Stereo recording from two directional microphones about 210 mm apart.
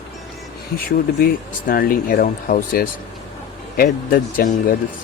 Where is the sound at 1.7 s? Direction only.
45° left (ahead or behind).